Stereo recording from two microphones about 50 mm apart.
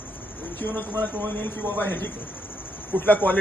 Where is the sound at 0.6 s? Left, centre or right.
Left.